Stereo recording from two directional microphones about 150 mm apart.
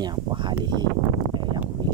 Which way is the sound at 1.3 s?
30° right (ahead or behind).